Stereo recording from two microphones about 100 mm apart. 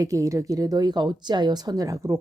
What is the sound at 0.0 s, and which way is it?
Speech, 35° right (ahead or behind).